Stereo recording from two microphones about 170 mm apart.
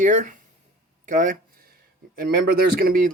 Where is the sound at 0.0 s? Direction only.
50° right (ahead or behind).